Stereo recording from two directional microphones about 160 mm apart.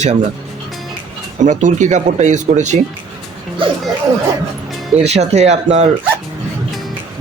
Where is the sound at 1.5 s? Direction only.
50° right (ahead or behind).